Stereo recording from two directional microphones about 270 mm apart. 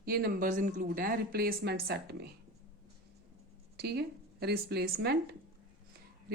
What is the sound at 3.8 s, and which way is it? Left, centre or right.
A woman's voice, right.